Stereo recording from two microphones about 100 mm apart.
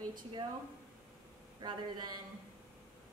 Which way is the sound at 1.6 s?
45° right (ahead or behind).